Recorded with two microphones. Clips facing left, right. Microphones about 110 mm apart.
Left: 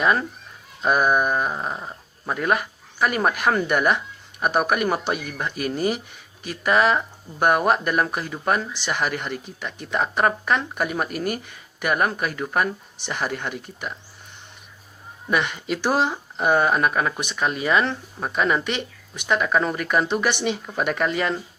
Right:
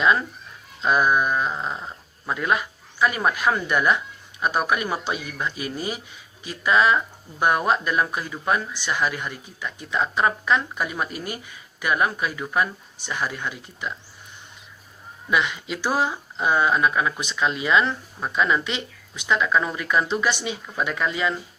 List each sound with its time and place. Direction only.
0.0 s a sound: 50° left (ahead or behind)
1.3 s dog: 15° left (ahead or behind)
2.3 s speech: 50° left (ahead or behind)
15.3 s speech: 55° left (ahead or behind)